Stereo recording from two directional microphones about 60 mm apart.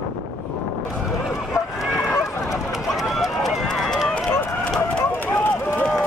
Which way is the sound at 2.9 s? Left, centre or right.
Centre.